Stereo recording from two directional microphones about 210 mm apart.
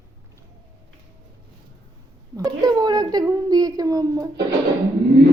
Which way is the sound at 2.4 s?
20° right (ahead or behind).